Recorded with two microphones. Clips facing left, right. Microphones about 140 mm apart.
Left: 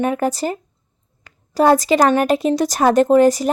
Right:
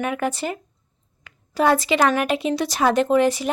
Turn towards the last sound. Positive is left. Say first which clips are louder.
# left 6 dB
turn(degrees=40)  # may be behind; listen again after turning